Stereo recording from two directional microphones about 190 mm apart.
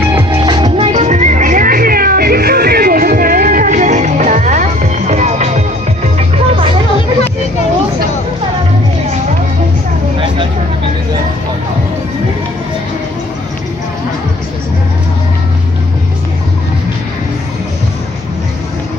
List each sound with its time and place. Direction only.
0.3 s music: 25° right (ahead or behind)
0.9 s music: 40° right (ahead or behind)